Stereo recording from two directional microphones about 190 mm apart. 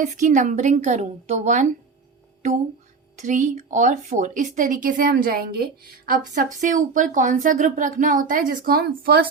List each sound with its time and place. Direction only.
0.0 s a woman's voice: 40° right (ahead or behind)
3.2 s speech: 40° right (ahead or behind)